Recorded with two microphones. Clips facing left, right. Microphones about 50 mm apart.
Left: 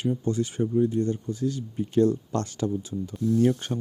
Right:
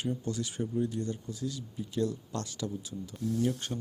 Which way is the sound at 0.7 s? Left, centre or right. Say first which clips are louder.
Left 9 dB; left.